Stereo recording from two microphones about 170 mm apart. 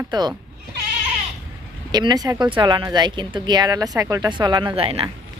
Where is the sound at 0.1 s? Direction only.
25° right (ahead or behind).